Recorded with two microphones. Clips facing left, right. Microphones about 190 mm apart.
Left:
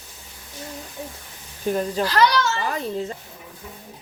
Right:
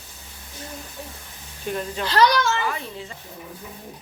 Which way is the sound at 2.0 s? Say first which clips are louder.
Right 2 dB; 35° left (ahead or behind).